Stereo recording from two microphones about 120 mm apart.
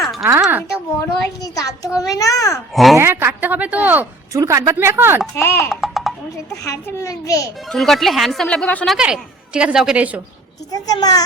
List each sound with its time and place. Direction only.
0.0 s a sound: centre (ahead or behind)
0.9 s a child's voice: 25° left (ahead or behind)
2.7 s speech: centre (ahead or behind)
3.0 s a woman's voice: 20° right (ahead or behind)
4.3 s speech: 25° right (ahead or behind)
5.3 s a child's voice: 20° left (ahead or behind)
5.8 s a sound: centre (ahead or behind)
6.7 s a child's voice: 25° left (ahead or behind)
7.7 s speech: centre (ahead or behind)
9.0 s a woman's voice: 5° right (ahead or behind)
10.7 s a child's voice: 30° left (ahead or behind)